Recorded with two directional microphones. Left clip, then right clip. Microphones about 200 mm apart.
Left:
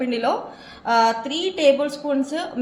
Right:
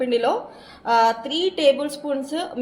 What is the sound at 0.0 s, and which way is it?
A woman's voice, 25° right (ahead or behind).